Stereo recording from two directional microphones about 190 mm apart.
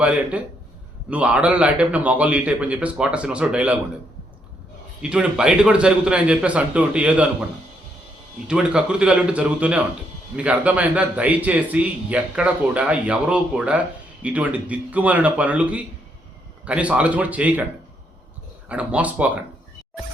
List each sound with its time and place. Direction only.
0.0 s a man's voice: 5° right (ahead or behind)
5.0 s a man's voice: 5° right (ahead or behind)
8.4 s a man's voice: 5° right (ahead or behind)
18.7 s a man's voice: 5° right (ahead or behind)